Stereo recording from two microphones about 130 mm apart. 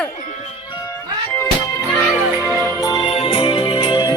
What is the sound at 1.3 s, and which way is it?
Music, 20° left (ahead or behind).